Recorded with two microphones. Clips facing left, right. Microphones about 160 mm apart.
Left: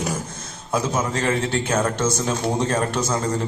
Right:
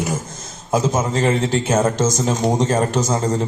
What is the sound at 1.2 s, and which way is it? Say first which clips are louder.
A man's voice: right 4 dB; 30° right (ahead or behind).